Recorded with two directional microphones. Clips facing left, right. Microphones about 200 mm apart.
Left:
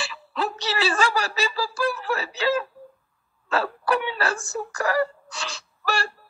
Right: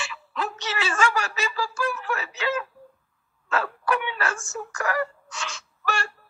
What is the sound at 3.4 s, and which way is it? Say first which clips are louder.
Wail: left 2 dB; 35° left (ahead or behind).